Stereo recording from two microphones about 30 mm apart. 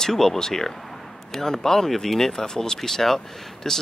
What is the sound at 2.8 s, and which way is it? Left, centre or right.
Speech, centre.